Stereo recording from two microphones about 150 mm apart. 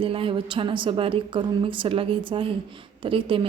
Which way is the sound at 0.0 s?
35° right (ahead or behind).